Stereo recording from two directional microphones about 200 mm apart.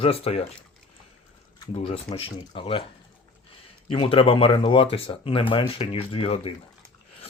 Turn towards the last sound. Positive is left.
turn(degrees=30)  # may be behind; listen again after turning